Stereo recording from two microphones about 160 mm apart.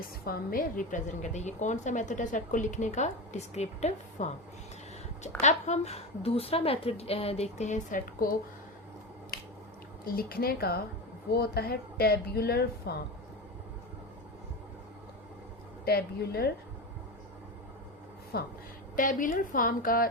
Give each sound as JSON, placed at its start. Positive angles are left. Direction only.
{"t": 0.0, "sound": "a woman's voice", "side_deg": 65}
{"t": 5.4, "sound": "a woman's voice", "side_deg": 45}
{"t": 10.1, "sound": "a woman's voice", "side_deg": 70}
{"t": 15.8, "sound": "a woman's voice", "side_deg": 75}
{"t": 18.3, "sound": "a woman's voice", "side_deg": 75}
{"t": 18.9, "sound": "a woman's voice", "side_deg": 55}